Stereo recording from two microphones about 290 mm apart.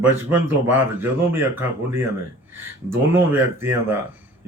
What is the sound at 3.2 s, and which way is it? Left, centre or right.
Speech, centre.